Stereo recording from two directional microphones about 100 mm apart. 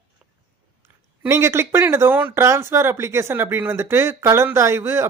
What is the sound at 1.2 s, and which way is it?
Speech, 25° right (ahead or behind).